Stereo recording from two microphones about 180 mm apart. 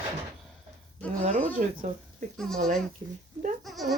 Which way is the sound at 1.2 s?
45° right (ahead or behind).